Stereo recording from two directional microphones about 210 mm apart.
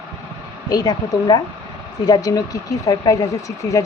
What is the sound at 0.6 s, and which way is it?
Speech, 20° left (ahead or behind).